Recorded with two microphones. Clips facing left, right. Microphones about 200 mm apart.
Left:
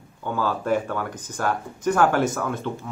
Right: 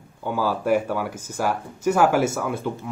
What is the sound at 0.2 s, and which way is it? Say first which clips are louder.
Speech: right 2 dB; 10° right (ahead or behind).